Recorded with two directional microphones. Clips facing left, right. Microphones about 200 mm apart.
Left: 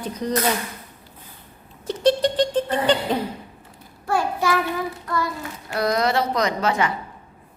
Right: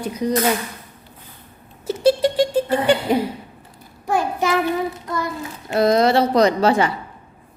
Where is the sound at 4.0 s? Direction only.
20° right (ahead or behind).